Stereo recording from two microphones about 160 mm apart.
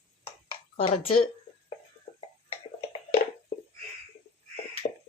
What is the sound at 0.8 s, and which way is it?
Speech, 35° left (ahead or behind).